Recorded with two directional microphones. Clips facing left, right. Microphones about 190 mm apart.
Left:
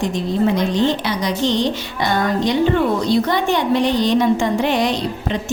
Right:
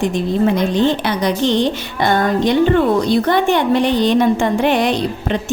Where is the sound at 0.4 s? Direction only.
55° right (ahead or behind).